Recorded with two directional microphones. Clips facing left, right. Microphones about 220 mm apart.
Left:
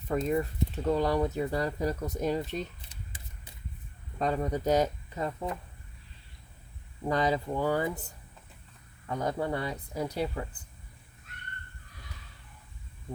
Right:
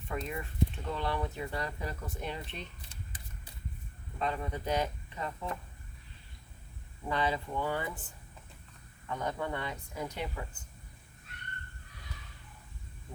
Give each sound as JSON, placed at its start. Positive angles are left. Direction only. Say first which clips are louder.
{"t": 0.1, "sound": "speech", "louder": "left 10 dB", "side_deg": 40}
{"t": 4.2, "sound": "speech", "louder": "left 6 dB", "side_deg": 40}
{"t": 7.1, "sound": "speech", "louder": "left 5 dB", "side_deg": 40}
{"t": 9.0, "sound": "speech", "louder": "left 5 dB", "side_deg": 35}